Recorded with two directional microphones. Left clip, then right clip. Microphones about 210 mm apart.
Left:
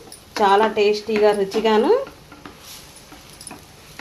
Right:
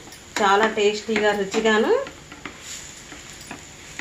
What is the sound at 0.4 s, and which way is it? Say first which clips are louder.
A woman's voice: left 3 dB; 50° left (ahead or behind).